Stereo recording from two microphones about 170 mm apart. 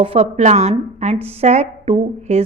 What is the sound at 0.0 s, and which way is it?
A woman's voice, 35° right (ahead or behind).